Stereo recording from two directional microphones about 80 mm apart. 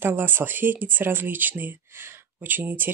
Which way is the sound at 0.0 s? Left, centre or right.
Right.